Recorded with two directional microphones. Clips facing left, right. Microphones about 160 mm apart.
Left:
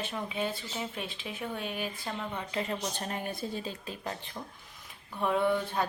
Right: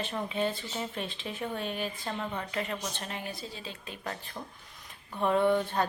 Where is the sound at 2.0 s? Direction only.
5° right (ahead or behind).